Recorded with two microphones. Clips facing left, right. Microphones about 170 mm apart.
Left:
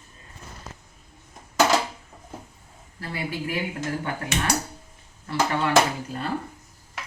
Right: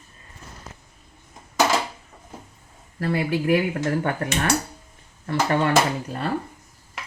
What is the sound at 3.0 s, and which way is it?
Speech, 70° right (ahead or behind).